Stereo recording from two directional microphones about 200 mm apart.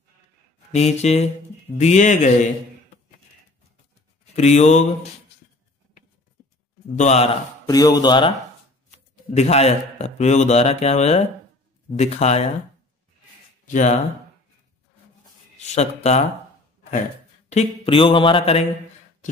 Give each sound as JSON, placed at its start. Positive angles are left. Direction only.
{"t": 0.7, "sound": "mantra", "side_deg": 35}
{"t": 4.4, "sound": "mantra", "side_deg": 35}
{"t": 7.0, "sound": "mantra", "side_deg": 35}
{"t": 7.6, "sound": "mantra", "side_deg": 20}
{"t": 8.9, "sound": "speech", "side_deg": 35}
{"t": 12.0, "sound": "mantra", "side_deg": 35}
{"t": 13.7, "sound": "mantra", "side_deg": 35}
{"t": 15.5, "sound": "speech", "side_deg": 35}
{"t": 17.5, "sound": "mantra", "side_deg": 30}